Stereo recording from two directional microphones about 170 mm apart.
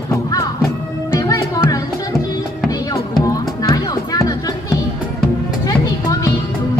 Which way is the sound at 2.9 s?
20° left (ahead or behind).